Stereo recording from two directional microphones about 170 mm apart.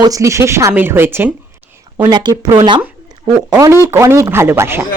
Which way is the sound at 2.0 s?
25° right (ahead or behind).